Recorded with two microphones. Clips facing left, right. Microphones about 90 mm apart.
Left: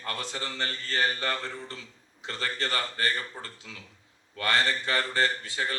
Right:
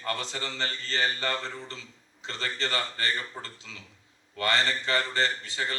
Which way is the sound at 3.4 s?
25° right (ahead or behind).